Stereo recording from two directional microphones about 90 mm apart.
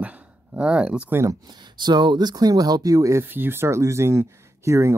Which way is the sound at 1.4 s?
55° right (ahead or behind).